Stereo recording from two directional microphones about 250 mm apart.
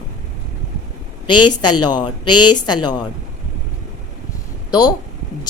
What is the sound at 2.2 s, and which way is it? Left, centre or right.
Speech, left.